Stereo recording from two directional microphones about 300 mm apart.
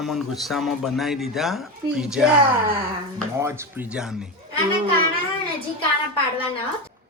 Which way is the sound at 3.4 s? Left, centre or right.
Centre.